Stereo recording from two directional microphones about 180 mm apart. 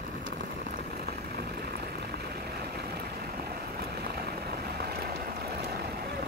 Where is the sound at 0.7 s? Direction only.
60° right (ahead or behind).